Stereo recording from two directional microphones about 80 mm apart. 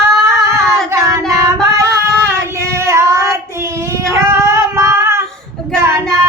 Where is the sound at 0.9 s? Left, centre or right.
Right.